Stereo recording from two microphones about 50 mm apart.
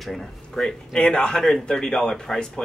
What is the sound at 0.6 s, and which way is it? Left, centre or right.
Speech, centre.